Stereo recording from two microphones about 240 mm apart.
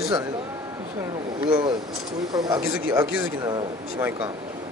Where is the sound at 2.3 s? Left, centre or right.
Centre.